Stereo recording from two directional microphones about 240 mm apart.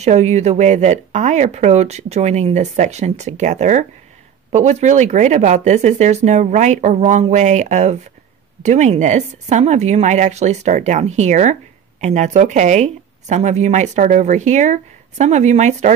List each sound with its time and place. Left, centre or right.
0.0 s speech: right